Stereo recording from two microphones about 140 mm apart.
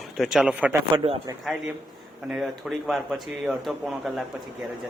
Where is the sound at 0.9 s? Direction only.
45° right (ahead or behind).